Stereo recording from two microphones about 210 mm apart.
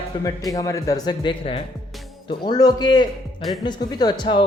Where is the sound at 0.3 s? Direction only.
15° left (ahead or behind).